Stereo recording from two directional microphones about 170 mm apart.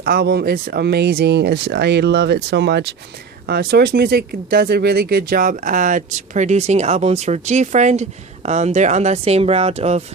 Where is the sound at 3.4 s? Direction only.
70° right (ahead or behind).